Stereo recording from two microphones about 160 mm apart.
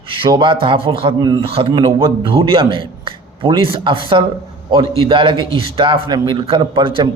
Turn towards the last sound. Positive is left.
turn(degrees=-30)  # may be behind; listen again after turning